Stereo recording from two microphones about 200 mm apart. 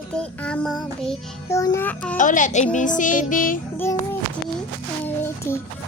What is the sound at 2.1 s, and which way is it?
Music, 40° left (ahead or behind).